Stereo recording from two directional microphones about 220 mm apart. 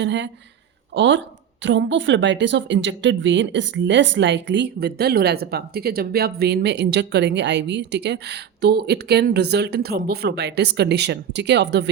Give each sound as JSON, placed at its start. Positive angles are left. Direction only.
{"t": 0.0, "sound": "speech", "side_deg": -55}